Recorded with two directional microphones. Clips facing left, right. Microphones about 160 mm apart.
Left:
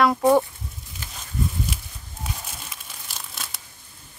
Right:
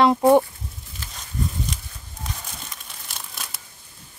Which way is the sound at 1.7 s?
5° left (ahead or behind).